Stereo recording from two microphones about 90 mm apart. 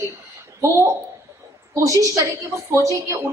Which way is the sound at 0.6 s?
35° right (ahead or behind).